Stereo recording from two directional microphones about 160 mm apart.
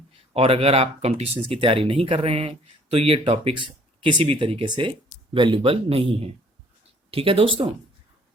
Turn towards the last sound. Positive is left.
turn(degrees=-35)  # may be behind; listen again after turning